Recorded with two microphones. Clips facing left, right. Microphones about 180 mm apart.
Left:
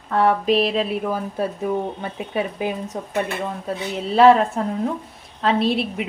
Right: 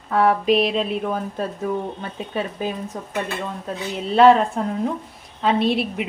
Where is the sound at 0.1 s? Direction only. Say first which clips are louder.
Even; centre (ahead or behind); by 3.8 s 15° left (ahead or behind).